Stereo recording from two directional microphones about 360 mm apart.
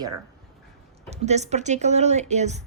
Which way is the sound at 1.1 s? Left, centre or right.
Centre.